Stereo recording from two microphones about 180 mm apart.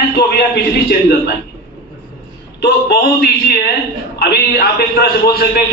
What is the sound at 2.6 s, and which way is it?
A man's voice, 60° left (ahead or behind).